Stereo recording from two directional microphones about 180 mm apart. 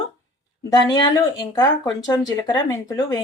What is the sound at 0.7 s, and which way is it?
Speech, 20° left (ahead or behind).